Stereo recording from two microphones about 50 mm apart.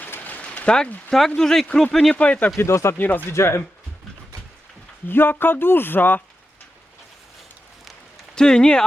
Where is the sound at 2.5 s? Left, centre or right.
Left.